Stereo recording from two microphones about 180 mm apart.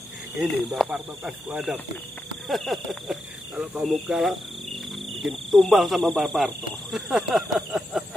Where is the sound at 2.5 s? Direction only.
Centre (ahead or behind).